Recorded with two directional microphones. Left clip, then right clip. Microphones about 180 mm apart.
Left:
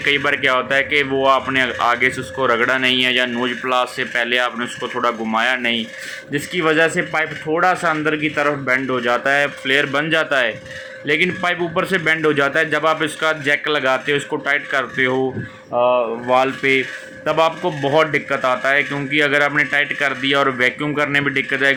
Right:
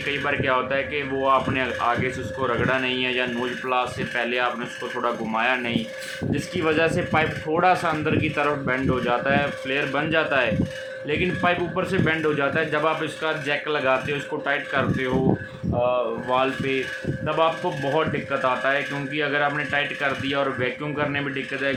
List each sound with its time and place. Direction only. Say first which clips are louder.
0.1 s speech: left 7 dB; 25° left (ahead or behind)
16.3 s speech: left 8 dB; 25° left (ahead or behind)